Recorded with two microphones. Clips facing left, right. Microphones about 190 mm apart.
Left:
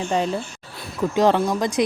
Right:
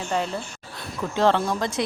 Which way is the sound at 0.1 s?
15° left (ahead or behind).